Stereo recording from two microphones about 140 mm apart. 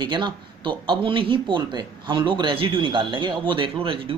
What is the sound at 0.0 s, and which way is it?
Speech, 35° right (ahead or behind).